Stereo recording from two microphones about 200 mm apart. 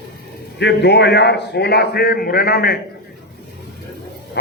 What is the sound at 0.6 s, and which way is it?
A man's voice, 60° left (ahead or behind).